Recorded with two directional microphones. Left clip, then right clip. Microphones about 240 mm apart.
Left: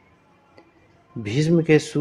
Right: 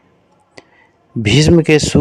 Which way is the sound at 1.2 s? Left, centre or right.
Right.